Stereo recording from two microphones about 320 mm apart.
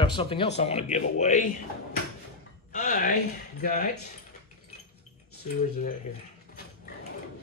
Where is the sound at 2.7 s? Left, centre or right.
Left.